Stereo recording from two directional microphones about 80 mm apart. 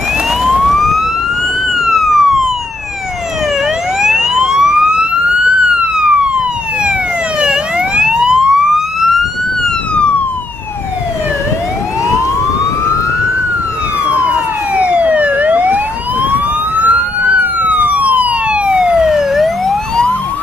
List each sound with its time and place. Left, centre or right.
0.4 s emergency vehicle: centre
1.8 s police car: centre
4.0 s emergency vehicle: centre
14.2 s emergency vehicle: centre